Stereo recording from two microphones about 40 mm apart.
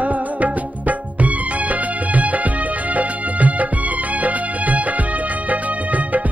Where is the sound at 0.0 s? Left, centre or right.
Right.